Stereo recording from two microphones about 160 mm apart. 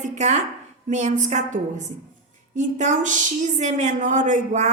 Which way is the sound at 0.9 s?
50° right (ahead or behind).